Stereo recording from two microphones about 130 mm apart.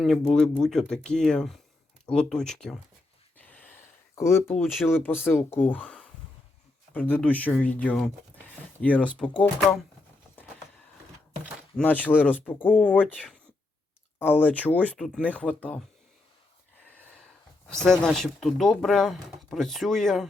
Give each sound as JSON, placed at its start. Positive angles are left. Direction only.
{"t": 0.0, "sound": "speech", "side_deg": 0}
{"t": 3.3, "sound": "a sound", "side_deg": 10}
{"t": 4.1, "sound": "speech", "side_deg": 20}
{"t": 11.8, "sound": "speech", "side_deg": 15}
{"t": 14.2, "sound": "speech", "side_deg": 15}
{"t": 14.9, "sound": "speech", "side_deg": 0}
{"t": 17.7, "sound": "speech", "side_deg": 5}